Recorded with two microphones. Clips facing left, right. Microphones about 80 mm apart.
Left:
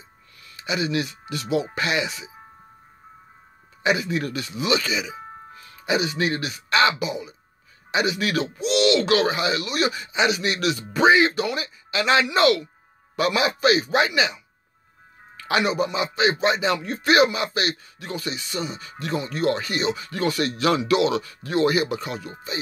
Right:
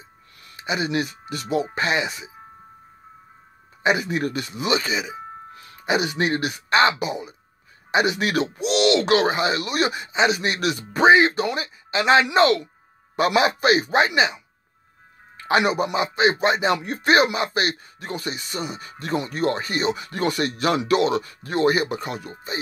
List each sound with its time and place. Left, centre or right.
0.4 s speech: right
3.8 s speech: right
15.3 s music: right
15.6 s speech: right